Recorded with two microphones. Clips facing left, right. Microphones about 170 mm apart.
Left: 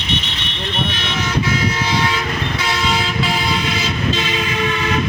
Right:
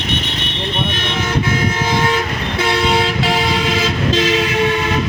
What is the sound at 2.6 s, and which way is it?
Train, 55° right (ahead or behind).